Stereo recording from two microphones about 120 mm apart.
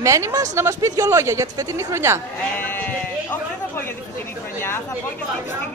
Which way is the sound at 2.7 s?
15° left (ahead or behind).